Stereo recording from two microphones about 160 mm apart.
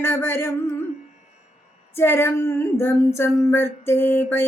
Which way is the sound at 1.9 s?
15° left (ahead or behind).